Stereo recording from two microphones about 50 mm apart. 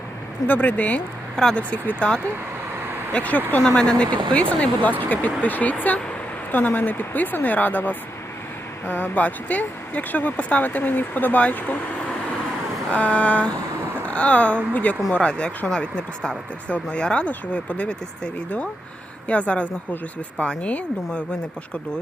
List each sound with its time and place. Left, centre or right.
0.4 s speech: left
1.4 s speech: centre
1.7 s speech: left
12.9 s speech: left